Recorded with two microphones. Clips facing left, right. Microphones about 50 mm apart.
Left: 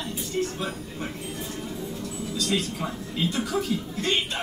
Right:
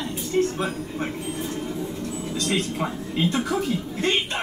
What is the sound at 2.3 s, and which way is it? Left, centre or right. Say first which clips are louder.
Speech: right 1 dB; right.